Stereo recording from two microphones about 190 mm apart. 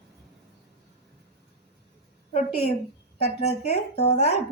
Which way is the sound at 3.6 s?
35° left (ahead or behind).